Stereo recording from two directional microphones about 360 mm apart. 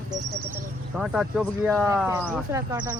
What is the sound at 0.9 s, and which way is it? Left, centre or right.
Speech, centre.